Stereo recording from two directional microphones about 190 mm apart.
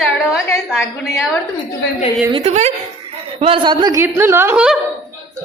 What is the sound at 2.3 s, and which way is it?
Speech, 35° right (ahead or behind).